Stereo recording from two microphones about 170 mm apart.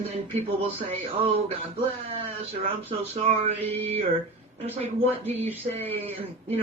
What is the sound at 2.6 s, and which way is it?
Speech, 35° right (ahead or behind).